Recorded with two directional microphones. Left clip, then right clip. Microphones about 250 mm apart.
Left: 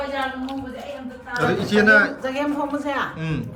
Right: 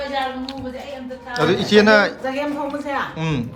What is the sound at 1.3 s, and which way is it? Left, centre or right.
A man's voice, centre.